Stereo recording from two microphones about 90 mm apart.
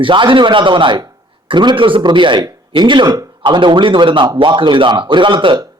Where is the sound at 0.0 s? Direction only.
65° right (ahead or behind).